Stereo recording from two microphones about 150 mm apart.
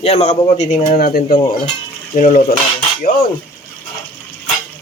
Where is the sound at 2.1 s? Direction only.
60° left (ahead or behind).